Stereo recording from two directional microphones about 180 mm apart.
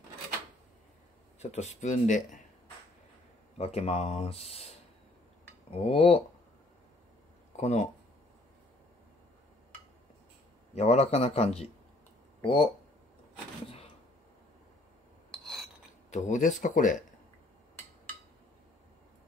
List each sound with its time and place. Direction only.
1.4 s speech: 40° left (ahead or behind)
3.5 s speech: 35° left (ahead or behind)
7.5 s speech: 40° left (ahead or behind)
10.7 s speech: 35° left (ahead or behind)
16.1 s speech: 45° left (ahead or behind)